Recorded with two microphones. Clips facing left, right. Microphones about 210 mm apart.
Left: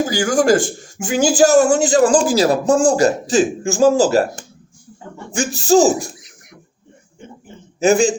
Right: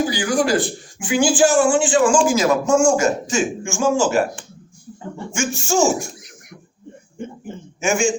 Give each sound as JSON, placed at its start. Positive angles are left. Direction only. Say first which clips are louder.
{"t": 0.1, "sound": "a man's voice", "louder": "left 4 dB", "side_deg": 45}
{"t": 7.8, "sound": "a man's voice", "louder": "left 6 dB", "side_deg": 35}